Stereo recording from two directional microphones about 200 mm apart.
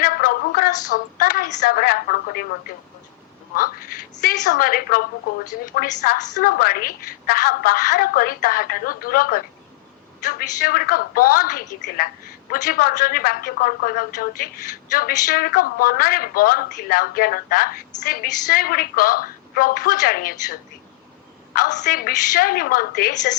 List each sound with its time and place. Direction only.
0.0 s a woman's voice: 45° left (ahead or behind)
4.1 s a woman's voice: 40° left (ahead or behind)
10.7 s a woman's voice: 45° left (ahead or behind)